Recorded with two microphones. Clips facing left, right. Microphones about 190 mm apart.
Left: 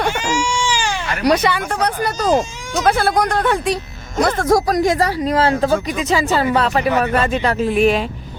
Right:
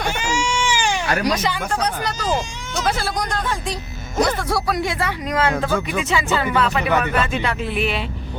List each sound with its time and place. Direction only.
0.4 s baby cry: 15° right (ahead or behind)
1.2 s speech: 60° left (ahead or behind)
4.2 s speech: 45° left (ahead or behind)